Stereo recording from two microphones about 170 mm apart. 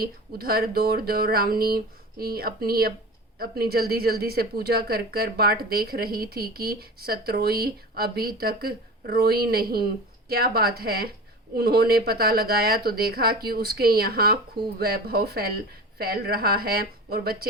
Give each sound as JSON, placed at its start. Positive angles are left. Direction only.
{"t": 0.0, "sound": "speech", "side_deg": -65}